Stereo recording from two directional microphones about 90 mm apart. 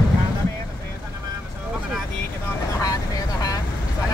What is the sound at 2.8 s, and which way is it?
Vehicle, 40° left (ahead or behind).